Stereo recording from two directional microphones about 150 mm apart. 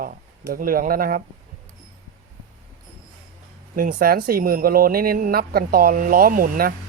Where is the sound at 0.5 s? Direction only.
75° right (ahead or behind).